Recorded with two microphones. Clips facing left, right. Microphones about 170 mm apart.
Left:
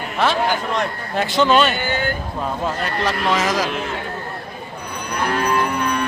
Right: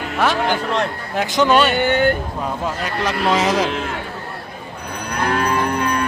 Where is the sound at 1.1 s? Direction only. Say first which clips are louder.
Even; 10° right (ahead or behind).